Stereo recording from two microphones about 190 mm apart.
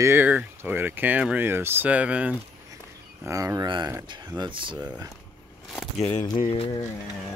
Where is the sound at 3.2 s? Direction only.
15° right (ahead or behind).